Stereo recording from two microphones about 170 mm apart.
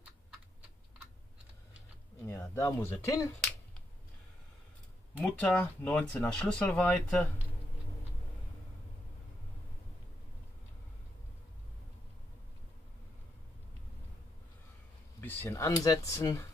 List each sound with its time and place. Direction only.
2.2 s speech: 15° left (ahead or behind)
5.2 s speech: 5° left (ahead or behind)
15.1 s speech: 15° left (ahead or behind)